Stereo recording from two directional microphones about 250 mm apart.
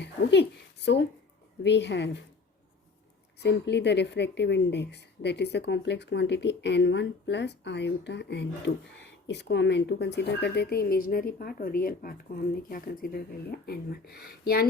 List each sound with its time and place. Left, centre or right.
0.0 s a sound: left
1.6 s a woman's voice: left
3.4 s a woman's voice: left